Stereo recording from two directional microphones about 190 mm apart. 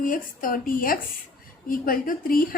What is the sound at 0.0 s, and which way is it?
A woman's voice, 45° left (ahead or behind).